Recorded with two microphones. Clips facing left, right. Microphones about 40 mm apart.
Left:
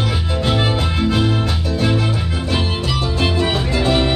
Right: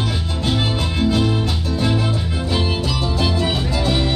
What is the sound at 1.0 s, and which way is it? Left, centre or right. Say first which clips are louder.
Music: right 1 dB; centre.